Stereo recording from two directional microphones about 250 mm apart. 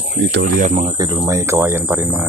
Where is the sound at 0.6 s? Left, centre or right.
Right; by 2.2 s centre.